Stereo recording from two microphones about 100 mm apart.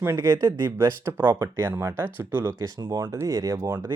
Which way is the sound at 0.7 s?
25° right (ahead or behind).